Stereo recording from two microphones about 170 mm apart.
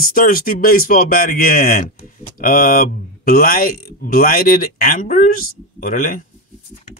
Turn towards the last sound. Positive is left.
turn(degrees=50)  # may be behind; listen again after turning